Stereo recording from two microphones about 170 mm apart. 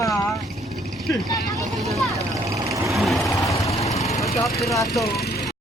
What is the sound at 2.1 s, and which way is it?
Vehicle, 20° right (ahead or behind).